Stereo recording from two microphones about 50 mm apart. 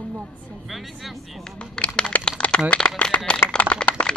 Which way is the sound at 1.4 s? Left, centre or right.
Centre.